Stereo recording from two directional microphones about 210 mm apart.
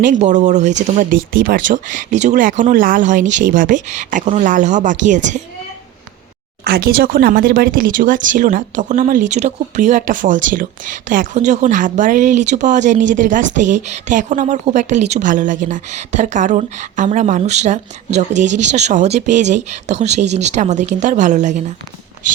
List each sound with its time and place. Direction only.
0.0 s a woman's voice: 35° right (ahead or behind)
6.7 s a woman's voice: 45° right (ahead or behind)